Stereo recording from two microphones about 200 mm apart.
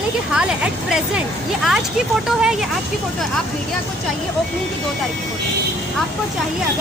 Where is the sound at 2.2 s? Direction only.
Centre (ahead or behind).